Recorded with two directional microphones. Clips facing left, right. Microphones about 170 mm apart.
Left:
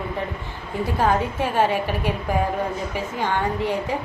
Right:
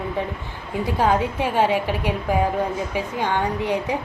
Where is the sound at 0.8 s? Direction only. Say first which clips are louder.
Right 1 dB; 15° right (ahead or behind).